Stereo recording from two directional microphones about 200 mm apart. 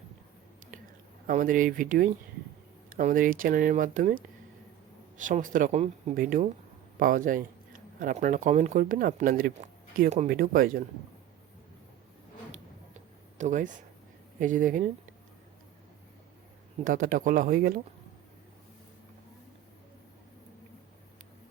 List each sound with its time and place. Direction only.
1.3 s speech: 40° right (ahead or behind)
13.4 s speech: 40° right (ahead or behind)
16.8 s speech: 45° right (ahead or behind)